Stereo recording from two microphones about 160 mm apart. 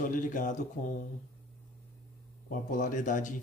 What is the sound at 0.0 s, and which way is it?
Speech, 55° left (ahead or behind).